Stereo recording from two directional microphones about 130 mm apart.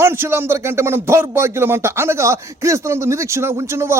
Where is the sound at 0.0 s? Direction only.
20° right (ahead or behind).